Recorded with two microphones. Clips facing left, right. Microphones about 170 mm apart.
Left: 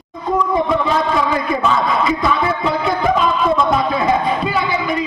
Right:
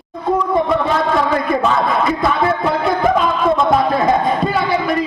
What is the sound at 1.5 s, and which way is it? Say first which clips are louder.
A man's voice: right 1 dB; 55° right (ahead or behind).